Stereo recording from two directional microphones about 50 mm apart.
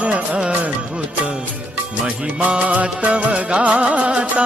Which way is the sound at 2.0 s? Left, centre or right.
Right.